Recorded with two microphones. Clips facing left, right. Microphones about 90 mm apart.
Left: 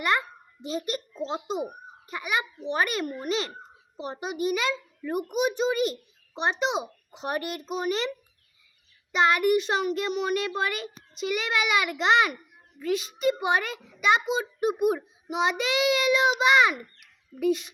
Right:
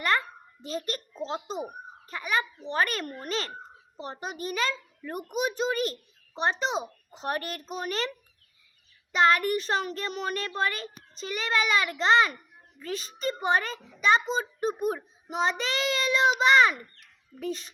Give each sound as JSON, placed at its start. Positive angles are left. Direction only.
{"t": 0.0, "sound": "a sound", "side_deg": 10}
{"t": 2.0, "sound": "a child's voice", "side_deg": 10}
{"t": 9.1, "sound": "a child's voice", "side_deg": 5}
{"t": 11.3, "sound": "a child's voice", "side_deg": -35}
{"t": 11.6, "sound": "a child's voice", "side_deg": 15}